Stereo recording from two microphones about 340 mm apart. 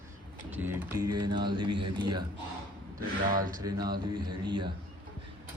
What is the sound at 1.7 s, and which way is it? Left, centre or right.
Speech, right.